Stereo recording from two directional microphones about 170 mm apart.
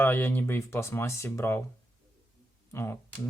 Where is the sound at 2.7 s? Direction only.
15° left (ahead or behind).